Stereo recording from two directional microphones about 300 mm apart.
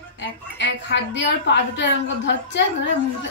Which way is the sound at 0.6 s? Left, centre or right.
Left.